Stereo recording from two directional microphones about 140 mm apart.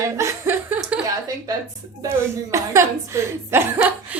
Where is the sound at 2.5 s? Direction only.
20° right (ahead or behind).